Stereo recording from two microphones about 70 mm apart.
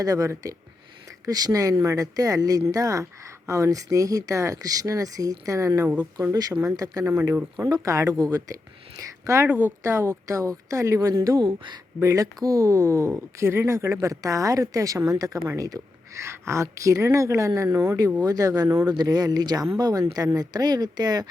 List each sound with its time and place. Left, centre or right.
0.0 s speech: right
7.0 s speech: right
7.7 s speech: right
8.2 s speech: right
9.0 s speech: right
9.5 s speech: right
9.8 s speech: right
11.1 s speech: right
11.9 s speech: right
16.2 s speech: right
18.9 s speech: right